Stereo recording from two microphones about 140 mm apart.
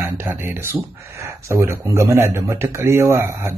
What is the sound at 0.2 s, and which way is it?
Speech, 15° right (ahead or behind).